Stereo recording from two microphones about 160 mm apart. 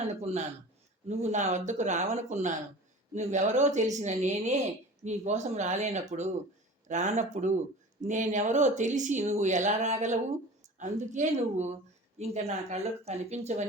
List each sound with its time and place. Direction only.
0.0 s speech: 40° right (ahead or behind)